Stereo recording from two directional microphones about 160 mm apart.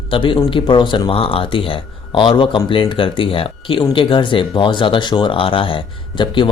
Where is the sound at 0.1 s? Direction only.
30° left (ahead or behind).